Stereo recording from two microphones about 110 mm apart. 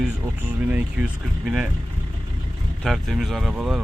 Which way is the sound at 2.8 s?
Centre (ahead or behind).